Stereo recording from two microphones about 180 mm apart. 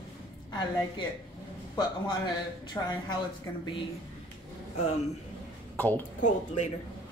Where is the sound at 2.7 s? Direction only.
25° left (ahead or behind).